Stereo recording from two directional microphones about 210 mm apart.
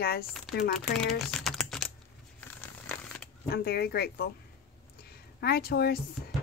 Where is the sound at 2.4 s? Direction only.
5° left (ahead or behind).